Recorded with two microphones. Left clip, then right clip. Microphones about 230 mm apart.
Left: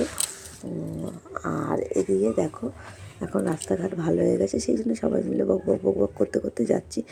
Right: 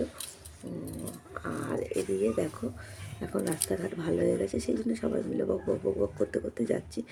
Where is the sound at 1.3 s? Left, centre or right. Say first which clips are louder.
Left 7 dB; centre.